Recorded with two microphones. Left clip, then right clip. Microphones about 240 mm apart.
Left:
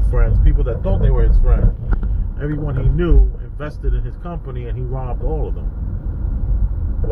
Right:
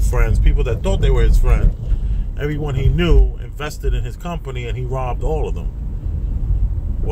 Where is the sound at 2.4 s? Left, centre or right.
Right.